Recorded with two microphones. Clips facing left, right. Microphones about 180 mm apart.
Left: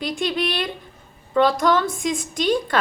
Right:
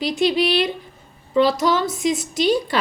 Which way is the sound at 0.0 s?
50° left (ahead or behind).